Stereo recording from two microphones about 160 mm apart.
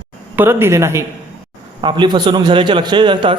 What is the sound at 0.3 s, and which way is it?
Speech, 15° right (ahead or behind).